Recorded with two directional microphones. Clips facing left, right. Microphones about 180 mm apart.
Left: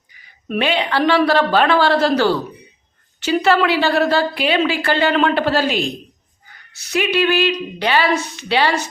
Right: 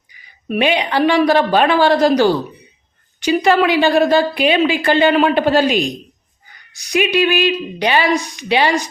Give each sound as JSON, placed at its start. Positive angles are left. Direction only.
{"t": 0.4, "sound": "a woman's voice", "side_deg": -10}